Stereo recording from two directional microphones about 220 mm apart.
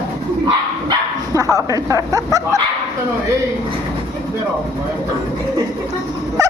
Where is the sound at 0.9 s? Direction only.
15° right (ahead or behind).